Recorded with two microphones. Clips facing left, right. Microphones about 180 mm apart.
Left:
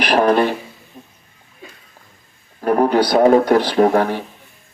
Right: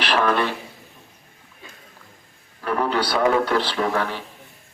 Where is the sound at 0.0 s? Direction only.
40° left (ahead or behind).